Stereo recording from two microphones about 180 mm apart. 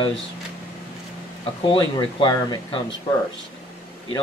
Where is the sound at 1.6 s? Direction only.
25° left (ahead or behind).